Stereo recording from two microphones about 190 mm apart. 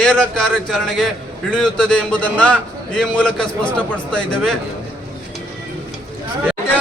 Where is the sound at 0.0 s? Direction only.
5° left (ahead or behind).